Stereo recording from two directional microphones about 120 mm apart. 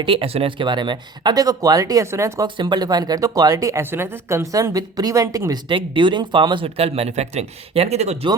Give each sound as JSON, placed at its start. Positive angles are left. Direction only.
{"t": 0.0, "sound": "speech", "side_deg": -50}
{"t": 2.6, "sound": "speech", "side_deg": -35}
{"t": 5.6, "sound": "speech", "side_deg": -45}